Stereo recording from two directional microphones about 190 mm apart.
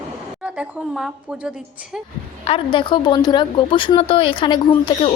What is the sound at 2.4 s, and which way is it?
A woman's voice, 30° left (ahead or behind).